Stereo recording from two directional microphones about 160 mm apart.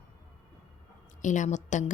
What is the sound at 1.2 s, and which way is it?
Speech, 50° left (ahead or behind).